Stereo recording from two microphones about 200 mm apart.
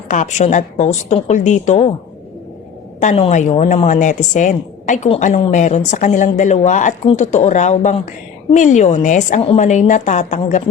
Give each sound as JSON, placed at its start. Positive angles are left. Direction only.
{"t": 0.1, "sound": "speech", "side_deg": 35}
{"t": 3.0, "sound": "speech", "side_deg": 35}